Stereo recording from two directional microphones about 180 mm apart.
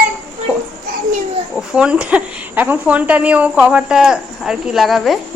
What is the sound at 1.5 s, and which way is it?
Speech, 5° right (ahead or behind).